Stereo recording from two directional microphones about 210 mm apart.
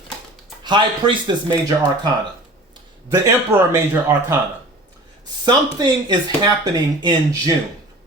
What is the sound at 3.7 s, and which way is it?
Speech, 10° right (ahead or behind).